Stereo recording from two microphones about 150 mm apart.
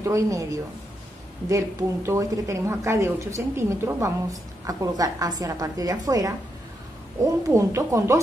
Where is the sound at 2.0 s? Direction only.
20° right (ahead or behind).